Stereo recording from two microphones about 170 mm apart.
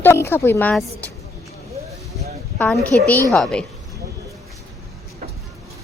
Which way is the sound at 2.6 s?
5° left (ahead or behind).